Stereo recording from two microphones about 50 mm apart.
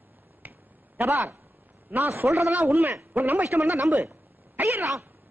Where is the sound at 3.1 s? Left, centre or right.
Right.